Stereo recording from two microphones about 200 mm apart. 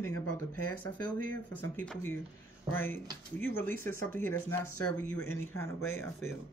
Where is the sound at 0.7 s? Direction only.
45° right (ahead or behind).